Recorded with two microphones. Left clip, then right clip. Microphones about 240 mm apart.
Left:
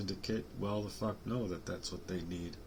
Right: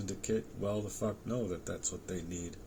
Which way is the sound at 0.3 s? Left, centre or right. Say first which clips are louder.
Right 4 dB; centre.